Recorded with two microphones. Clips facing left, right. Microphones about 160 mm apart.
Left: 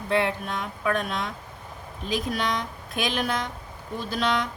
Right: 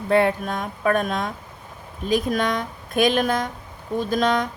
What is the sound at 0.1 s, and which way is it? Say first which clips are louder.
Speech: right 6 dB; 45° right (ahead or behind).